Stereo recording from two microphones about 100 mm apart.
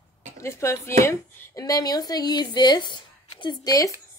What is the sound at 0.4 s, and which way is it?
A woman's voice, 30° left (ahead or behind).